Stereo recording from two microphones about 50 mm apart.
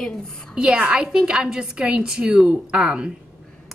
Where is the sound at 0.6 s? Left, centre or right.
Right.